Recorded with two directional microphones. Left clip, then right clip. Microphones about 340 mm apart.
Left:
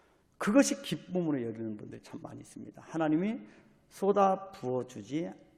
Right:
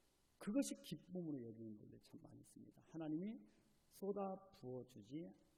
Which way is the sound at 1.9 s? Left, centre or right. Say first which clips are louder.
Left 18 dB; left.